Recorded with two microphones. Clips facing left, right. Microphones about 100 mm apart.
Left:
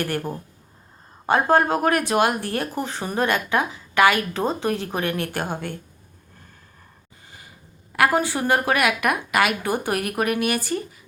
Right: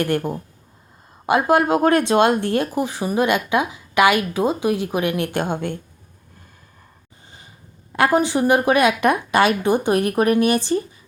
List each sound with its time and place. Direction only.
0.0 s a woman's voice: 20° right (ahead or behind)
7.9 s a woman's voice: 25° right (ahead or behind)